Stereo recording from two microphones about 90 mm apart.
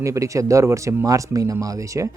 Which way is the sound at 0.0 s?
35° right (ahead or behind).